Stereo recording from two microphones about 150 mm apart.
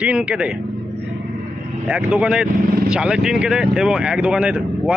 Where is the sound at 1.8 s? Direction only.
10° right (ahead or behind).